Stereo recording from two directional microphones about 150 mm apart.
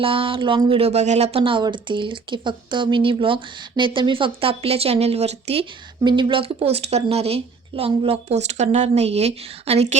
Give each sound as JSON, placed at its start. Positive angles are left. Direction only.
{"t": 0.0, "sound": "speech", "side_deg": -35}